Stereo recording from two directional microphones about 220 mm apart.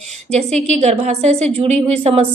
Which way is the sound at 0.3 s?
30° right (ahead or behind).